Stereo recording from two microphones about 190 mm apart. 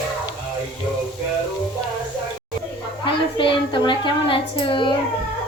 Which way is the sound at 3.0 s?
25° left (ahead or behind).